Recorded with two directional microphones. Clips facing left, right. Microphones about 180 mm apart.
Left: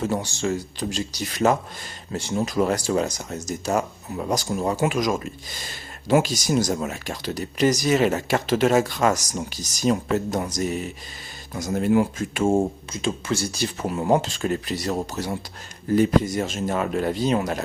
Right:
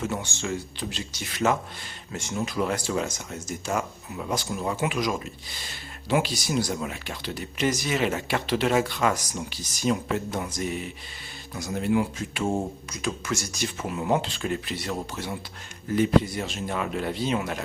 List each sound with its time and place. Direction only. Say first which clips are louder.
0.0 s speech: left 5 dB; 35° left (ahead or behind)
12.9 s speech: left 4 dB; 25° left (ahead or behind)